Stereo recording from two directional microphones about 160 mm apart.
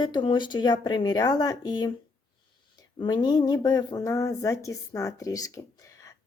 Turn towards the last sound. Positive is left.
turn(degrees=20)  # may be behind; listen again after turning